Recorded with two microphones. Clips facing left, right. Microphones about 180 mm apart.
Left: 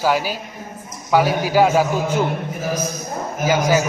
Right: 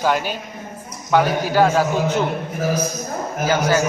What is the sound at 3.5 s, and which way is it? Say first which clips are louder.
Speech: left 1 dB; 10° left (ahead or behind).